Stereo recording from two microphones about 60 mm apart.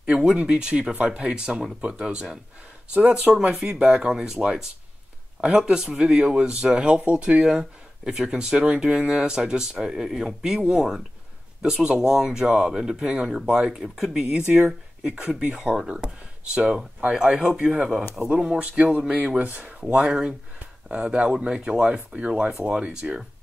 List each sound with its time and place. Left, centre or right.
0.0 s speech: centre
19.9 s speech: centre